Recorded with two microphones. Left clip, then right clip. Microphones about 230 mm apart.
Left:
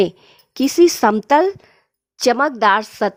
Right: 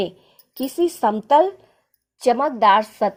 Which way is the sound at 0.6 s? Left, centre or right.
Left.